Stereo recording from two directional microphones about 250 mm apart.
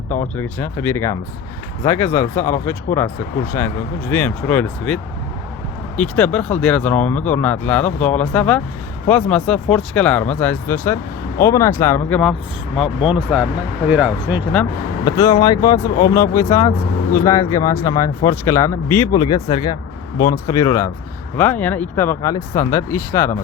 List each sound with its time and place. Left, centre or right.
0.3 s speech: centre
6.0 s speech: centre
15.0 s speech: centre